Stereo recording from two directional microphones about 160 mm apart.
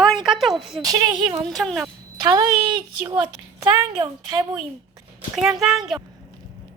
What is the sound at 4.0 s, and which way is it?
Speech, 20° right (ahead or behind).